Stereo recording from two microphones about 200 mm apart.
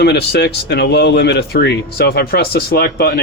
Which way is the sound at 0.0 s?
55° left (ahead or behind).